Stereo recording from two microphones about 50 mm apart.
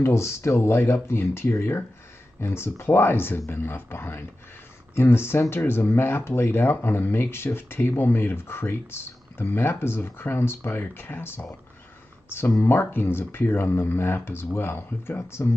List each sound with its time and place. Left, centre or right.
0.0 s speech: left